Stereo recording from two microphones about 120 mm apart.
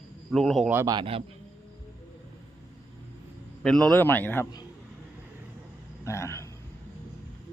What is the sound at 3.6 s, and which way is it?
Speech, 5° left (ahead or behind).